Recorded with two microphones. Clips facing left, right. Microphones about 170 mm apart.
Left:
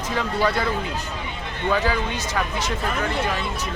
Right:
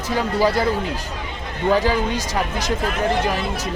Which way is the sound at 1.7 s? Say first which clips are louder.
Right 4 dB; 35° right (ahead or behind).